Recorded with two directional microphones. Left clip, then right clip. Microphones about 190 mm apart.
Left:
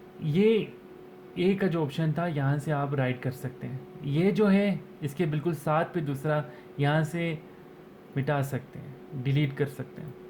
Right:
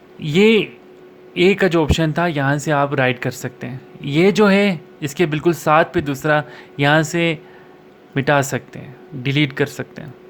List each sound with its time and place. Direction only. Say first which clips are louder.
0.2 s speech: right 11 dB; 40° right (ahead or behind)